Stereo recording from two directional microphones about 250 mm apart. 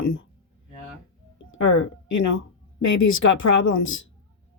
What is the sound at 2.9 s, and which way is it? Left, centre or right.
Speech, left.